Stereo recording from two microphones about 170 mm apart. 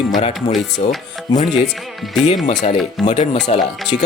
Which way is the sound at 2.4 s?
40° left (ahead or behind).